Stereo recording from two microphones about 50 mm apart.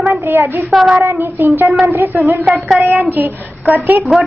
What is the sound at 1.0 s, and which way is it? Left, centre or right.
Speech, right.